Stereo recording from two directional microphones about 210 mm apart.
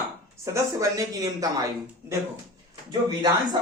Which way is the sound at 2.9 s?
20° right (ahead or behind).